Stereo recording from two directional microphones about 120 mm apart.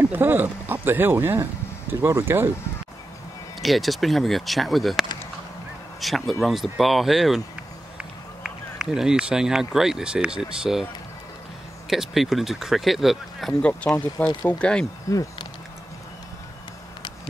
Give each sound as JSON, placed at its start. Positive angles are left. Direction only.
{"t": 0.1, "sound": "speech", "side_deg": -15}
{"t": 3.6, "sound": "speech", "side_deg": 0}
{"t": 11.9, "sound": "speech", "side_deg": 0}